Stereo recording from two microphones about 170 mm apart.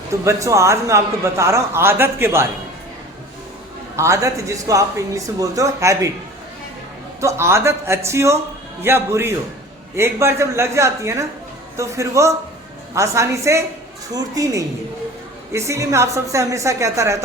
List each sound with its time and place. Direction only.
0.3 s a man's voice: 20° right (ahead or behind)
3.9 s speech: 15° right (ahead or behind)
7.2 s a man's voice: 15° right (ahead or behind)